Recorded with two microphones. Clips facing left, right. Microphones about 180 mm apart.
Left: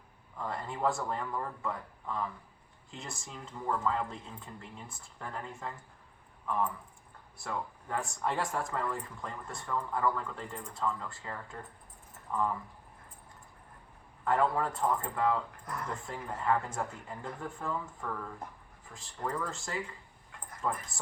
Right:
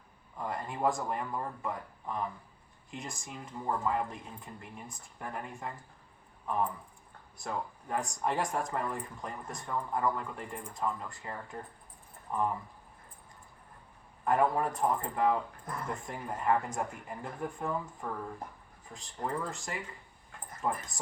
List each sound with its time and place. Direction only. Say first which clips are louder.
0.3 s speech: right 1 dB; 15° right (ahead or behind)
14.3 s speech: right 1 dB; 15° right (ahead or behind)